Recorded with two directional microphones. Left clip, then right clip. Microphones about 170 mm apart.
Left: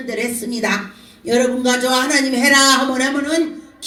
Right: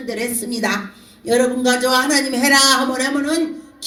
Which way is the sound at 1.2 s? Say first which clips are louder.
Even; 40° right (ahead or behind).